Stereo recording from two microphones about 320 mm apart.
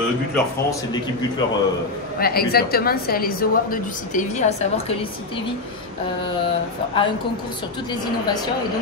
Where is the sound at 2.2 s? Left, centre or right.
Left.